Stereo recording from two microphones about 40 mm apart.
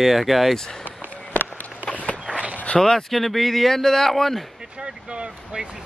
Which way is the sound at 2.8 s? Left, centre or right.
Centre.